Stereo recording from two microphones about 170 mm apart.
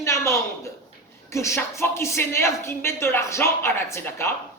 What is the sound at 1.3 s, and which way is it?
A woman's voice, 15° left (ahead or behind).